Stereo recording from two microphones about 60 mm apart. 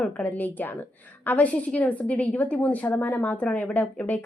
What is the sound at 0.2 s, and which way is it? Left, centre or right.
A woman's voice, left.